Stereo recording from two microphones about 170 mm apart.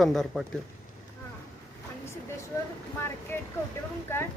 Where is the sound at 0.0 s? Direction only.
Centre (ahead or behind).